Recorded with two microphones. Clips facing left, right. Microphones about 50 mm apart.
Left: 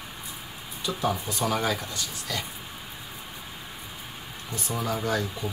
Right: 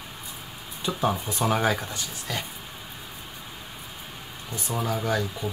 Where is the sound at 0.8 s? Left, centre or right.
Right.